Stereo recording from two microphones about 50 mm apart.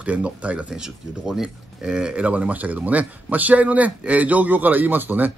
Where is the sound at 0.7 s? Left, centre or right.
Centre; by 5.3 s right.